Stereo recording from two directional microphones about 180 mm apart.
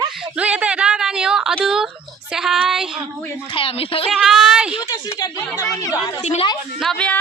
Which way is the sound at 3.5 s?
30° left (ahead or behind).